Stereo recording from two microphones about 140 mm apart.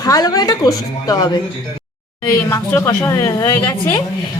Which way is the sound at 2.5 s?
20° left (ahead or behind).